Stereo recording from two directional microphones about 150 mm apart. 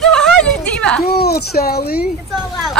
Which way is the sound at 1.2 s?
90° left.